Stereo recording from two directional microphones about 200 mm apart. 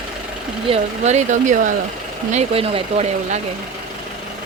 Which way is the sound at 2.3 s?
30° right (ahead or behind).